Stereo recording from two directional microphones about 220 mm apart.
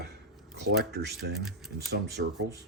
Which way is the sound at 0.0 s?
50° right (ahead or behind).